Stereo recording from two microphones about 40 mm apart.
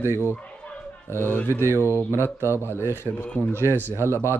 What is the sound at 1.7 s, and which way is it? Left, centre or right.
Speech, right.